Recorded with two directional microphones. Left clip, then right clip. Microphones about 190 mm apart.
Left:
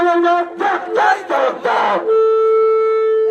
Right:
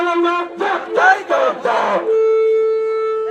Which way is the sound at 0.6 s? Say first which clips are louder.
Right 2 dB; 35° right (ahead or behind).